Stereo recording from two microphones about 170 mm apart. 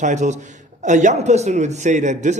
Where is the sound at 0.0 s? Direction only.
45° right (ahead or behind).